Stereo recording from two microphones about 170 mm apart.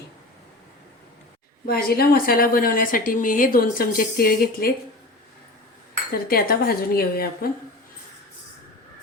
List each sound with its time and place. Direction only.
1.6 s a woman's voice: 65° left (ahead or behind)
6.2 s a woman's voice: 60° left (ahead or behind)